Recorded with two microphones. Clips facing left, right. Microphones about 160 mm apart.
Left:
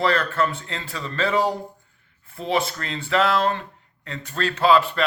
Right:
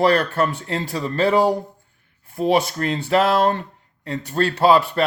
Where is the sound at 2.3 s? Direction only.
45° right (ahead or behind).